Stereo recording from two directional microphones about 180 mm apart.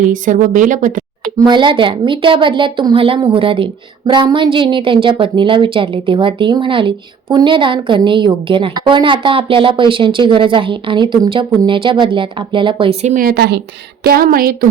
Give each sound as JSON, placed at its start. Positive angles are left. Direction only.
{"t": 0.0, "sound": "a woman's voice", "side_deg": -45}
{"t": 1.5, "sound": "a woman's voice", "side_deg": -25}
{"t": 13.2, "sound": "a woman's voice", "side_deg": -65}